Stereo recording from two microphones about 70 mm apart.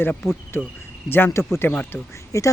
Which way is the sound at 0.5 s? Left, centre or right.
Left.